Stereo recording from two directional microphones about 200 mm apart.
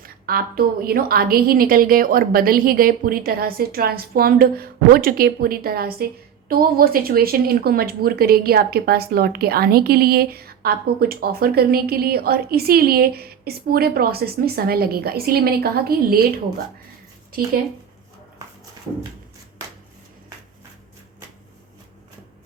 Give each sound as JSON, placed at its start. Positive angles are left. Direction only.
{"t": 0.0, "sound": "speech", "side_deg": -45}